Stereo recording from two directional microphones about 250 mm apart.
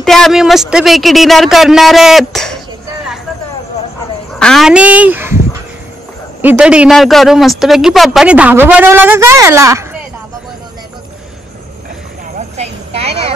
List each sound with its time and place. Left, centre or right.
0.0 s speech: centre
4.4 s speech: centre
6.4 s speech: centre
12.4 s vehicle: right